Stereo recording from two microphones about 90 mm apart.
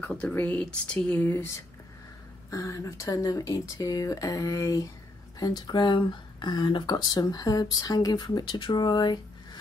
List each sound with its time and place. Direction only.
0.0 s speech: 15° left (ahead or behind)
2.5 s speech: 35° left (ahead or behind); by 9.6 s 60° left (ahead or behind)